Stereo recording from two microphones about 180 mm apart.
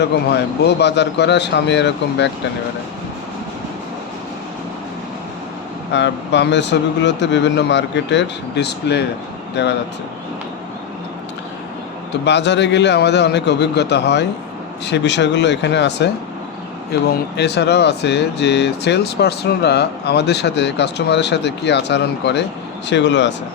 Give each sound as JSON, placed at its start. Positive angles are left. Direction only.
{"t": 0.0, "sound": "speech", "side_deg": 65}
{"t": 5.9, "sound": "speech", "side_deg": 75}
{"t": 12.2, "sound": "speech", "side_deg": 75}
{"t": 17.3, "sound": "speech", "side_deg": 70}